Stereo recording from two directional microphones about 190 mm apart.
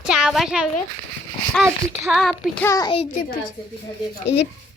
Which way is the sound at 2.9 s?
35° left (ahead or behind).